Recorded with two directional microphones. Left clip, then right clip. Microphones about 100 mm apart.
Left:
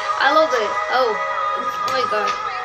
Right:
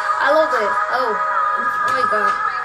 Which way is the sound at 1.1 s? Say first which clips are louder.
Right 3 dB; 30° right (ahead or behind).